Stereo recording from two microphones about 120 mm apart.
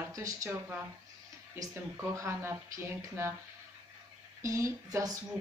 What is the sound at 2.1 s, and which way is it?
A woman's voice, 20° right (ahead or behind).